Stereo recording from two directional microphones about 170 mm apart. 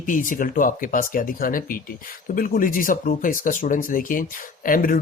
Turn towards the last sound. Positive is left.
turn(degrees=55)  # may be behind; listen again after turning